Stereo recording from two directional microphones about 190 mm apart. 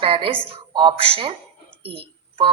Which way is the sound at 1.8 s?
30° right (ahead or behind).